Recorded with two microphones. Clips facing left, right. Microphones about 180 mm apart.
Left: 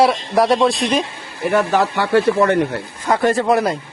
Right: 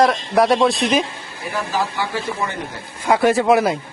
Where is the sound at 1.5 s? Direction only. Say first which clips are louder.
Left 7 dB; 70° left (ahead or behind).